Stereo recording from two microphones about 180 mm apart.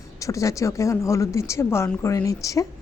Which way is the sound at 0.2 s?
15° left (ahead or behind).